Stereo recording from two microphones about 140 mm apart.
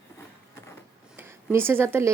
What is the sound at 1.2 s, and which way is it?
Speech, 15° right (ahead or behind).